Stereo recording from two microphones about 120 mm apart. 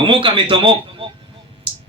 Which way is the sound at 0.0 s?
45° right (ahead or behind).